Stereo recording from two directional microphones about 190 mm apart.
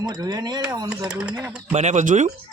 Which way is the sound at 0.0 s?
20° right (ahead or behind).